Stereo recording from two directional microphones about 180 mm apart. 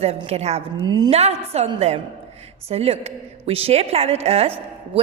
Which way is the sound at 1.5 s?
35° right (ahead or behind).